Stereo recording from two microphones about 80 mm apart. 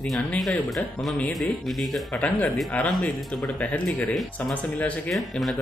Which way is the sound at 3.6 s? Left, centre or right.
Centre.